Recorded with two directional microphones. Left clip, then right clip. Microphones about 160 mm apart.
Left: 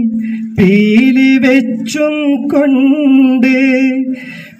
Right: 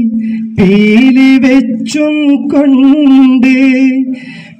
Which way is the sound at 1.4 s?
15° right (ahead or behind).